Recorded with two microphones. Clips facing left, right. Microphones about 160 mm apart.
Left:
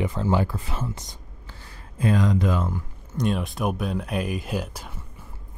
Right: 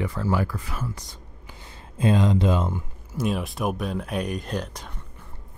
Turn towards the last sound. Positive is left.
turn(degrees=5)  # may be behind; listen again after turning